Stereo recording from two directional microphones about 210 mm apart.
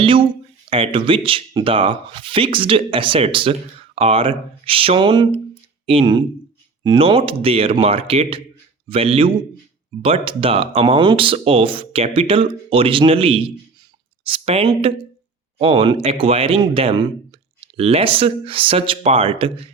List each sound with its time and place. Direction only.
0.0 s speech: 25° right (ahead or behind)